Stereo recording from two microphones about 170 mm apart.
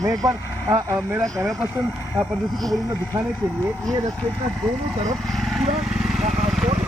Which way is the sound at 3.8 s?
20° right (ahead or behind).